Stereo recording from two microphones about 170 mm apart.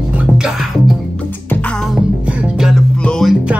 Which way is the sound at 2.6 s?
Centre (ahead or behind).